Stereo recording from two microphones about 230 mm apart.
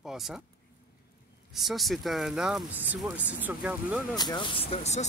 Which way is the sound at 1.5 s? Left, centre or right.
Centre.